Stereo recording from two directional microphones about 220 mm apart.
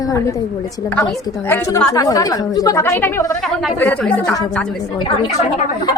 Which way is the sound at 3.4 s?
Centre (ahead or behind).